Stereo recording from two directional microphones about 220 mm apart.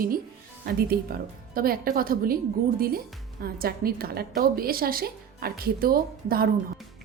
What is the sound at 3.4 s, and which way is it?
A woman's voice, 45° right (ahead or behind).